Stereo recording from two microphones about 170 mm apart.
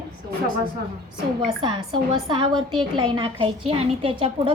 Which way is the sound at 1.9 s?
25° right (ahead or behind).